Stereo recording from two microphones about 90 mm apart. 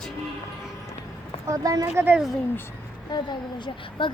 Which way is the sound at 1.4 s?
40° right (ahead or behind).